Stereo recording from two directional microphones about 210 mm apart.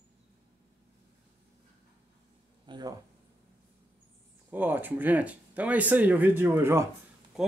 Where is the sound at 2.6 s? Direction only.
20° right (ahead or behind).